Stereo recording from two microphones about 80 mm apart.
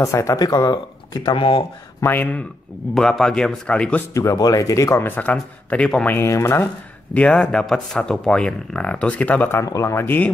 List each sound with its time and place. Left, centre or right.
0.0 s speech: left
0.5 s speech: left
2.0 s a man's voice: left
2.9 s speech: centre
4.1 s speech: left
4.9 s a man's voice: left
6.0 s speech: left
7.2 s speech: centre
9.7 s speech: left